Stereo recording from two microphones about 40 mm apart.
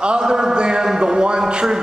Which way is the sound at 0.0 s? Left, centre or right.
Right.